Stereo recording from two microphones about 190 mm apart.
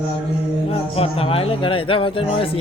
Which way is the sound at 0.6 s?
30° left (ahead or behind).